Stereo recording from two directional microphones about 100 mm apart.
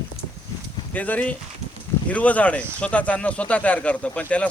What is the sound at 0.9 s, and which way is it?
Speech, 15° left (ahead or behind).